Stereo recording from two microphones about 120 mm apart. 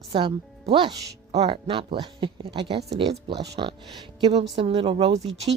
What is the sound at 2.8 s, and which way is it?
A woman's voice, 60° right (ahead or behind).